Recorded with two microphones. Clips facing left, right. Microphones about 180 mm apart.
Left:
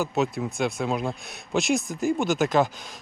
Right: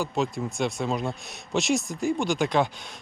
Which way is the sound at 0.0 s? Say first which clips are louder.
Left 2 dB; 5° left (ahead or behind).